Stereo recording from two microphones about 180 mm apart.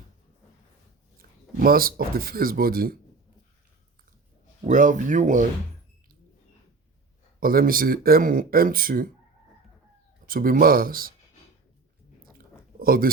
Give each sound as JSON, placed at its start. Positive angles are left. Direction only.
{"t": 1.5, "sound": "speech", "side_deg": -55}
{"t": 4.6, "sound": "speech", "side_deg": -45}
{"t": 7.3, "sound": "speech", "side_deg": -55}
{"t": 10.2, "sound": "speech", "side_deg": -50}
{"t": 12.8, "sound": "speech", "side_deg": -55}